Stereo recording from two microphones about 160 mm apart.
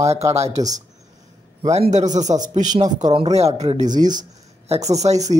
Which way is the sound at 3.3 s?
40° right (ahead or behind).